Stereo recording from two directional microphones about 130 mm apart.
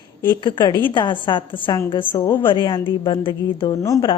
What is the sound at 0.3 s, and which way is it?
A woman's voice, 35° left (ahead or behind).